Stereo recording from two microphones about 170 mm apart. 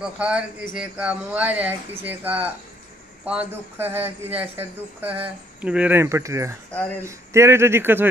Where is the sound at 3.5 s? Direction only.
10° right (ahead or behind).